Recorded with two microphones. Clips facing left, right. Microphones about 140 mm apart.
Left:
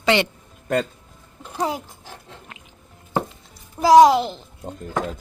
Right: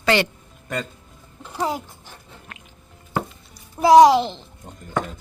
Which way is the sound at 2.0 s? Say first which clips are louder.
Left 4 dB; 90° left.